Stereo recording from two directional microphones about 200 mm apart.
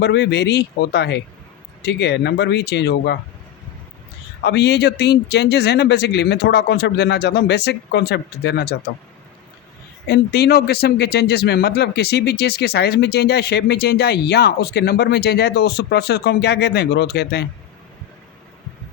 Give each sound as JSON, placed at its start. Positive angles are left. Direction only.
{"t": 0.0, "sound": "speech", "side_deg": 60}
{"t": 4.4, "sound": "speech", "side_deg": 55}
{"t": 10.1, "sound": "speech", "side_deg": 55}